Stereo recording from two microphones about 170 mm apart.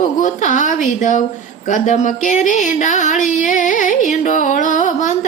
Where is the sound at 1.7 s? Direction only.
45° left (ahead or behind).